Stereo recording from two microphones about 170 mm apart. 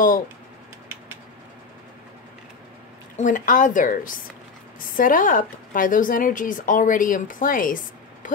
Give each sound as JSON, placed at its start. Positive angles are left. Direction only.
{"t": 3.2, "sound": "a woman's voice", "side_deg": 50}